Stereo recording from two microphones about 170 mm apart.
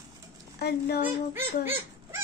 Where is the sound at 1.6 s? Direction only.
15° right (ahead or behind).